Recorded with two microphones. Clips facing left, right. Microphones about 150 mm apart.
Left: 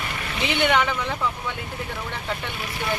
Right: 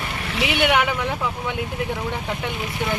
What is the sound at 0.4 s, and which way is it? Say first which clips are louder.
Speech: right 1 dB; 10° right (ahead or behind).